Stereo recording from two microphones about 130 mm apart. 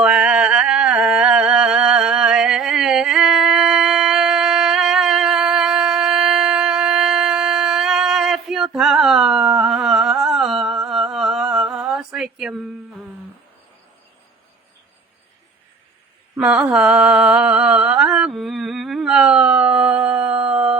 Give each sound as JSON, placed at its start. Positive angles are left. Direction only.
{"t": 0.0, "sound": "singing", "side_deg": -5}
{"t": 16.4, "sound": "mantra", "side_deg": -10}